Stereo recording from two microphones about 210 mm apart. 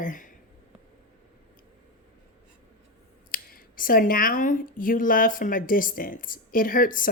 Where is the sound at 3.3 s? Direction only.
40° left (ahead or behind).